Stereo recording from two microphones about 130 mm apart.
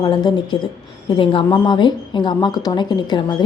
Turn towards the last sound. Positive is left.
turn(degrees=35)  # may be behind; listen again after turning